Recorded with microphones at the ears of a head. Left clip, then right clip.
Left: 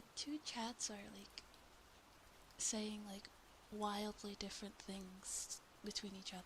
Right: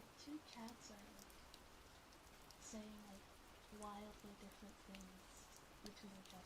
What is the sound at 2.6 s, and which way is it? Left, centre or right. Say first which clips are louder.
Speech: left 13 dB; left.